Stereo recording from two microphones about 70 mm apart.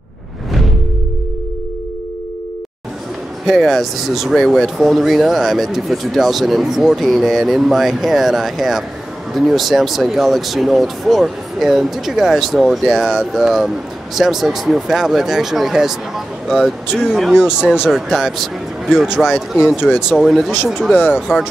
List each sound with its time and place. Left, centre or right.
3.4 s speech: centre
20.9 s speech: left